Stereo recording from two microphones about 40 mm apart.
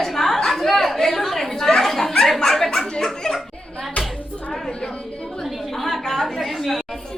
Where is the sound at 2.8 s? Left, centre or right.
Centre.